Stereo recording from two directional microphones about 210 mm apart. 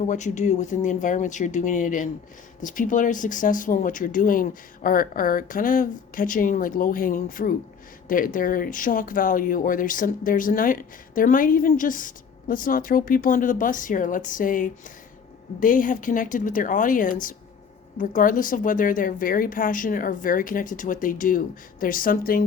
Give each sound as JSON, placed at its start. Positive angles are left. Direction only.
{"t": 0.1, "sound": "speech", "side_deg": 35}